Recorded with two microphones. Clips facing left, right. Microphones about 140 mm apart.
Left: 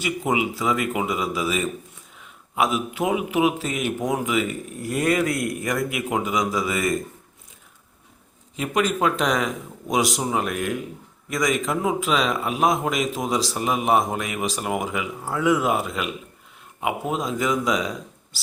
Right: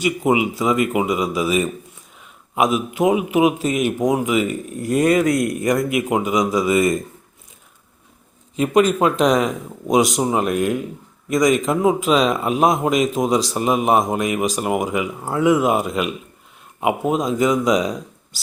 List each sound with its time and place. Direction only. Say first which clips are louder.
0.0 s a man's voice: right 6 dB; 15° right (ahead or behind)
8.5 s a man's voice: right 7 dB; 25° right (ahead or behind)